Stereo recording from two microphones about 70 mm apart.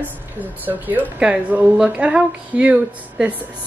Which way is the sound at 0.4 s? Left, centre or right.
Right.